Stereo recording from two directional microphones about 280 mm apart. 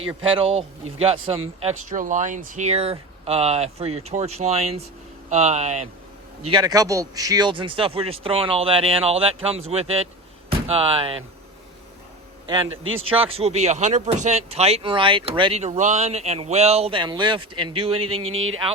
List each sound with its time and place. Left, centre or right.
0.3 s speech: centre
12.6 s speech: right
13.1 s speech: centre
18.2 s speech: right